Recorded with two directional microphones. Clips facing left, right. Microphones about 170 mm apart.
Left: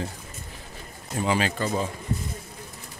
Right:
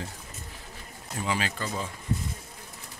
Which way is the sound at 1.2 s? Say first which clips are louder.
Left 6 dB; 25° left (ahead or behind).